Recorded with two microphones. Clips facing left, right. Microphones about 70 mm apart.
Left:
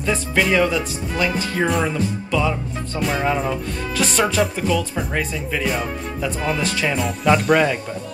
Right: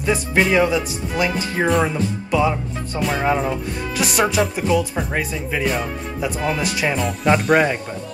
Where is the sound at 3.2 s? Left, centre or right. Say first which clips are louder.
Right 1 dB; centre.